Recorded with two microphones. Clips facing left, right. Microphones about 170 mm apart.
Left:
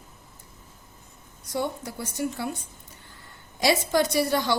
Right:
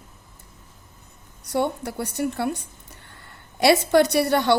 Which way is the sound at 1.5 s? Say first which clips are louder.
Right 5 dB; 65° right (ahead or behind).